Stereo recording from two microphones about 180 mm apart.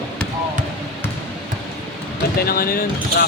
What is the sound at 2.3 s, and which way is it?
Speech, 55° left (ahead or behind).